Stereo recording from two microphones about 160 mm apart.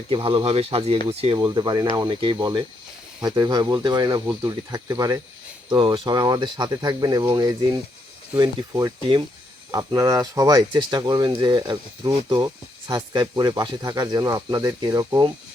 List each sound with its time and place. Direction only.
0.1 s speech: 35° right (ahead or behind)
1.5 s speech: 25° right (ahead or behind)